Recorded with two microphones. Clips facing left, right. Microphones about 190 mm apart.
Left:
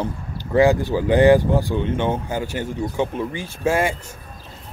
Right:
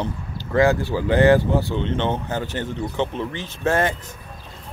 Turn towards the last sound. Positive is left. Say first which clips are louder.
# left 1 dB
turn(degrees=10)  # may be behind; listen again after turning